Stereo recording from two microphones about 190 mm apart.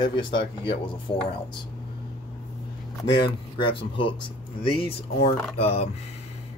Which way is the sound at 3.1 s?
25° left (ahead or behind).